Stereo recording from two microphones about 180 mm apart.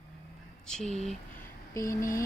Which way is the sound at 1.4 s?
15° left (ahead or behind).